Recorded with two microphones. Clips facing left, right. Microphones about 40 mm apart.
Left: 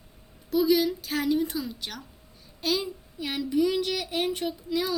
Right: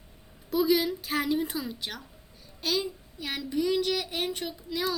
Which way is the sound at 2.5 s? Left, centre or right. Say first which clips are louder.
Left 2 dB; centre.